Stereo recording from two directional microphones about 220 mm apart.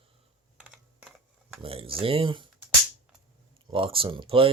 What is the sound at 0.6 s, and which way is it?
Typing, 5° right (ahead or behind).